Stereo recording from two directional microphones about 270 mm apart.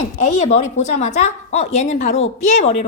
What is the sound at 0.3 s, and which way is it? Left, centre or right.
A woman's voice, left.